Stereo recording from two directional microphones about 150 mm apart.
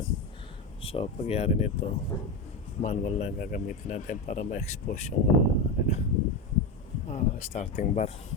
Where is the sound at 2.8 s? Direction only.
50° left (ahead or behind).